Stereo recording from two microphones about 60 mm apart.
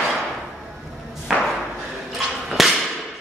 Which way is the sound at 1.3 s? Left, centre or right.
Centre.